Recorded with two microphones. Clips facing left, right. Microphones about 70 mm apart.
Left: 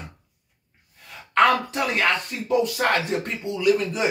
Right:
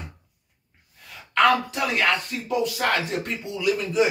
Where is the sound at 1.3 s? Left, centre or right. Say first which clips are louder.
Left 1 dB; left.